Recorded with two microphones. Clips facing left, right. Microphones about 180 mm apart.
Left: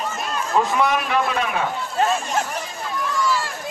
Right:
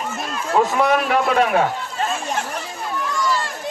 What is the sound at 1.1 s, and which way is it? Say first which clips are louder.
Speech: right 5 dB; 60° right (ahead or behind).